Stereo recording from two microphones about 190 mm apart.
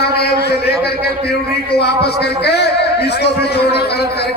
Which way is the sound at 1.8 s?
60° left (ahead or behind).